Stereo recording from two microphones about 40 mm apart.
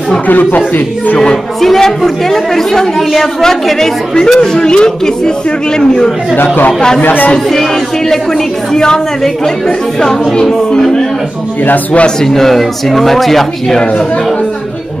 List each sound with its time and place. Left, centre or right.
0.3 s speech: left
1.1 s speech: left
1.6 s speech: centre
4.4 s speech: left
6.3 s speech: left
8.1 s speech: centre
11.6 s speech: left
12.2 s speech: centre